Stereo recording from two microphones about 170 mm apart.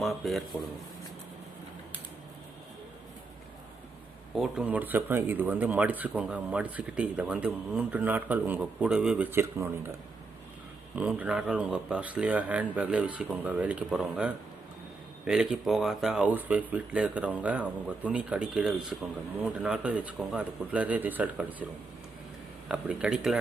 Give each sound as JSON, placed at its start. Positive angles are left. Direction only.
{"t": 0.0, "sound": "speech", "side_deg": 0}
{"t": 4.4, "sound": "speech", "side_deg": -5}
{"t": 10.9, "sound": "speech", "side_deg": -5}
{"t": 22.7, "sound": "speech", "side_deg": -5}